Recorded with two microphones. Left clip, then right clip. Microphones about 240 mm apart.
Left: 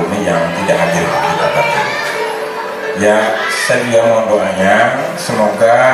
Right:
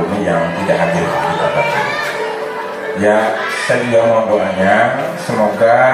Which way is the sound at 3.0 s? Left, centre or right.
Centre.